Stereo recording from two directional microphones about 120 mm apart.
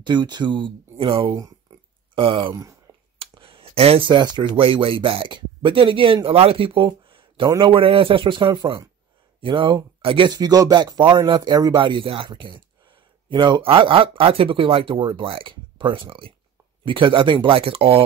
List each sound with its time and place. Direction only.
0.0 s speech: 40° right (ahead or behind)
3.2 s a sound: 50° right (ahead or behind)
4.1 s speech: 40° right (ahead or behind)
10.3 s speech: 35° right (ahead or behind); by 18.0 s 50° right (ahead or behind)